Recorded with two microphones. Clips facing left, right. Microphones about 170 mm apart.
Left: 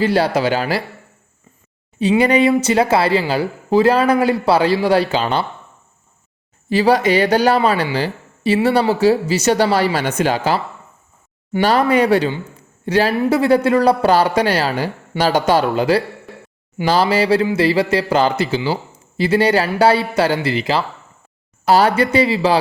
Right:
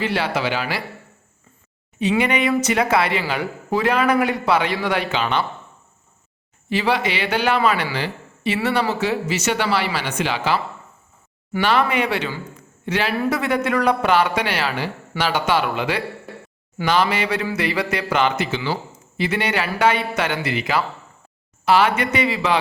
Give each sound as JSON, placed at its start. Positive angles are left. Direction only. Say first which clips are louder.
{"t": 0.0, "sound": "speech", "louder": "left 6 dB", "side_deg": 40}
{"t": 2.0, "sound": "speech", "louder": "left 6 dB", "side_deg": 35}
{"t": 6.7, "sound": "speech", "louder": "left 7 dB", "side_deg": 40}
{"t": 11.6, "sound": "speech", "louder": "left 5 dB", "side_deg": 40}
{"t": 12.5, "sound": "a sound", "louder": "left 7 dB", "side_deg": 35}
{"t": 13.1, "sound": "speech", "louder": "left 6 dB", "side_deg": 30}